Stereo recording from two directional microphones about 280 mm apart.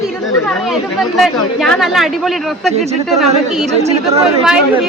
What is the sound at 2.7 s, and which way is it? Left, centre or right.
Speech, right.